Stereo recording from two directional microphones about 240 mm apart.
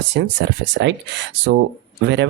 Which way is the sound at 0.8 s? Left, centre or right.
Right.